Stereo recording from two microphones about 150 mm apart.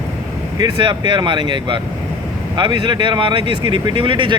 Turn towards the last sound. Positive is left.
turn(degrees=-35)  # may be behind; listen again after turning